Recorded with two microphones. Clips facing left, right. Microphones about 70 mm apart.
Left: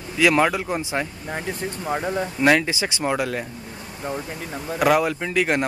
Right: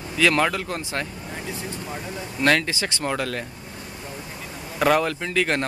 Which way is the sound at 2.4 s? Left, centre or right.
Centre.